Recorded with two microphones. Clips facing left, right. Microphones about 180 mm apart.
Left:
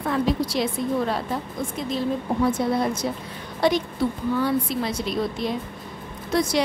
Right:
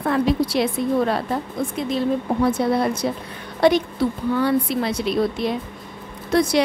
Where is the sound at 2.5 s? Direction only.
65° right (ahead or behind).